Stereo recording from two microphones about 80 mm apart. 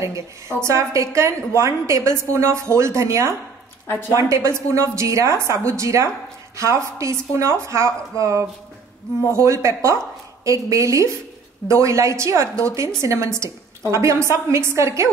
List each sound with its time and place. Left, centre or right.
0.0 s a woman's voice: right
3.8 s speech: left
4.2 s a woman's voice: right